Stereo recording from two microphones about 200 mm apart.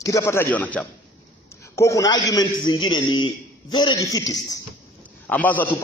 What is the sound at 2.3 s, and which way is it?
A man's voice, 20° left (ahead or behind).